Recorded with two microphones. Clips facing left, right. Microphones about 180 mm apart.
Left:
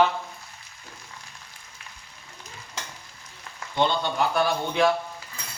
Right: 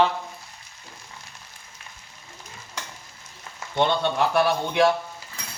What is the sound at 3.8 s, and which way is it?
Speech, 65° right (ahead or behind).